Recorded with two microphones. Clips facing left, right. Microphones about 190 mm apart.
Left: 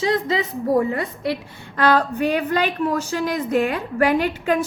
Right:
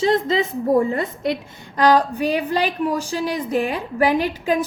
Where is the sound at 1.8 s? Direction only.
15° right (ahead or behind).